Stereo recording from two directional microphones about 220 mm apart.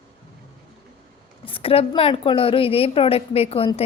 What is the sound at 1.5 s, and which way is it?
A woman's voice, 25° left (ahead or behind).